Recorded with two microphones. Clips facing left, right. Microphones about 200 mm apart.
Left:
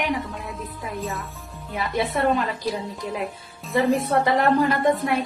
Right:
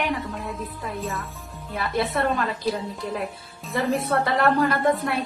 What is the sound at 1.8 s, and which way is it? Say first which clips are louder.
Speech: left 1 dB; 15° left (ahead or behind).